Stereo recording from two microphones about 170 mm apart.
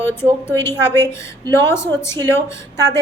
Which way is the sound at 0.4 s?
15° left (ahead or behind).